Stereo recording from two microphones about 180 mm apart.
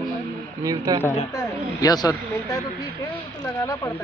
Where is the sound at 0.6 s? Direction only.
20° right (ahead or behind).